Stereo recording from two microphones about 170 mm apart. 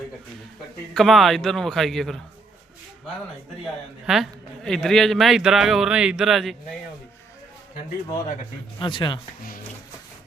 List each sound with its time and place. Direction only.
0.9 s a man's voice: centre (ahead or behind)
3.6 s a man's voice: centre (ahead or behind)
8.8 s speech: 25° left (ahead or behind)